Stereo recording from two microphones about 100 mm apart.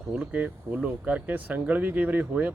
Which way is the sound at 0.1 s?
15° right (ahead or behind).